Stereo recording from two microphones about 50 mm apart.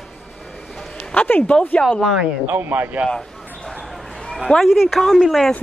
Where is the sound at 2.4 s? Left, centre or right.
Right.